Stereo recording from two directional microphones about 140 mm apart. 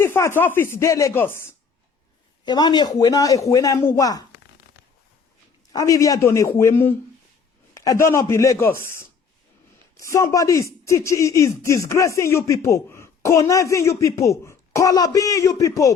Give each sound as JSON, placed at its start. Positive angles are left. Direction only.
{"t": 0.0, "sound": "speech", "side_deg": 15}
{"t": 2.4, "sound": "speech", "side_deg": 30}
{"t": 5.7, "sound": "speech", "side_deg": 25}